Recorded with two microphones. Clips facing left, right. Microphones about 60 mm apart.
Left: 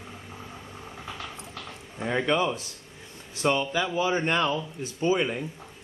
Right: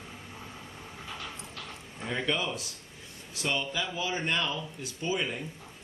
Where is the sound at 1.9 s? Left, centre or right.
Left.